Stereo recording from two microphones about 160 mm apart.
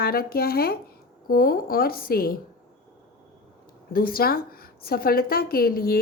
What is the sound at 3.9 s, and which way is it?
A woman's voice, 65° left (ahead or behind).